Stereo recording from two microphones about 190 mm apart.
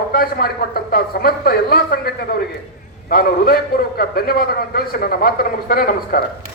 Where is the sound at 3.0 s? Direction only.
50° left (ahead or behind).